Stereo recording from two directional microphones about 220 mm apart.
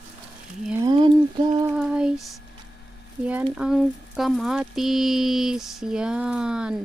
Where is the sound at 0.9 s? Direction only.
20° right (ahead or behind).